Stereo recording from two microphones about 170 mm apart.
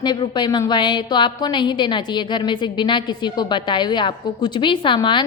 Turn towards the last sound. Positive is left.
turn(degrees=30)  # may be behind; listen again after turning